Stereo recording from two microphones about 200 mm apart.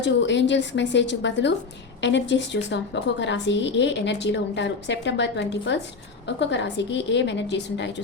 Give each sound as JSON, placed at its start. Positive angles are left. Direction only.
{"t": 0.0, "sound": "a woman's voice", "side_deg": 65}